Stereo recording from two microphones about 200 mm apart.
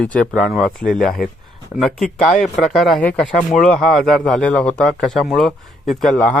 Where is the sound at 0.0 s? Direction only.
5° left (ahead or behind).